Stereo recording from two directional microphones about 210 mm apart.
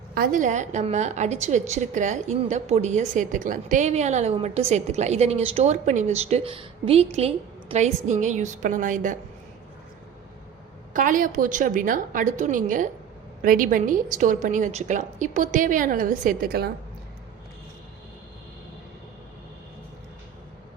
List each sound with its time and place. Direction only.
0.1 s a woman's voice: 40° right (ahead or behind)
10.9 s a woman's voice: 40° right (ahead or behind)